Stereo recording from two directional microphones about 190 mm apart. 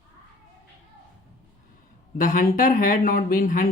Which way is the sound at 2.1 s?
45° left (ahead or behind).